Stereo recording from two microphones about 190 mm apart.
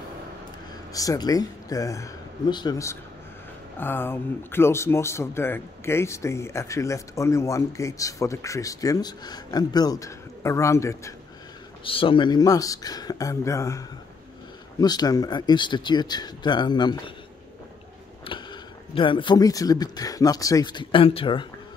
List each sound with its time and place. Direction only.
0.9 s speech: 20° left (ahead or behind)
11.8 s speech: 30° left (ahead or behind)
18.2 s speech: 25° left (ahead or behind)